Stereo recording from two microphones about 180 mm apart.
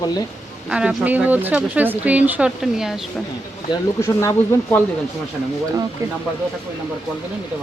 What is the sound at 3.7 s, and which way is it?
Speech, 15° left (ahead or behind).